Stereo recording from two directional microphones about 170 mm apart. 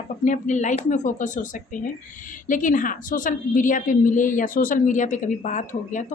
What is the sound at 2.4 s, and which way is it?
A woman's voice, 50° left (ahead or behind).